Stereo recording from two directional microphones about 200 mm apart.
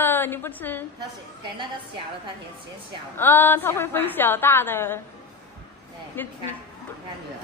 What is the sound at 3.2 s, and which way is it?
A woman's voice, 10° left (ahead or behind).